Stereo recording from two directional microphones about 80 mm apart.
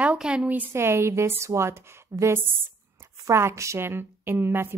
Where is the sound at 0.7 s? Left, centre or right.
Right.